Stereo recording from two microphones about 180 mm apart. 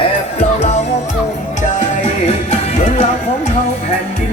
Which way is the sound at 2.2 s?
35° left (ahead or behind).